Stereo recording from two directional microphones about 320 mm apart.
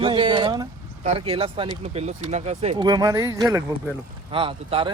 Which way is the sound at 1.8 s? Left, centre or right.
Centre.